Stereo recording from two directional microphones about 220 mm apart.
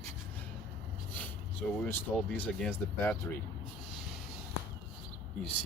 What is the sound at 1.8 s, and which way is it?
Speech, 5° left (ahead or behind).